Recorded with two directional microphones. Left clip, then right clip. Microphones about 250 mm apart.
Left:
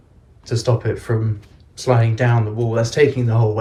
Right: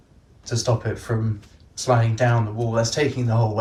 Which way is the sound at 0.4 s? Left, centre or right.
Centre.